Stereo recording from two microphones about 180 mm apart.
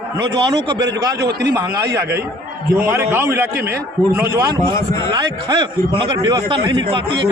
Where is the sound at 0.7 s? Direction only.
75° right (ahead or behind).